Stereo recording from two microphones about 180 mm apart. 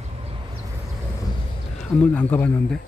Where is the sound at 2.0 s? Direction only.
10° left (ahead or behind).